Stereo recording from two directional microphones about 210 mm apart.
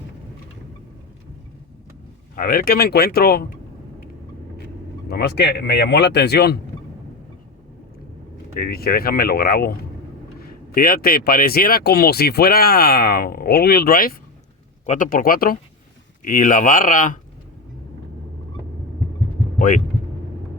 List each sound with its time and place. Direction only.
2.3 s speech: 45° left (ahead or behind)
5.0 s speech: 50° left (ahead or behind)
8.5 s speech: 45° left (ahead or behind)
19.5 s heart sounds: 40° left (ahead or behind)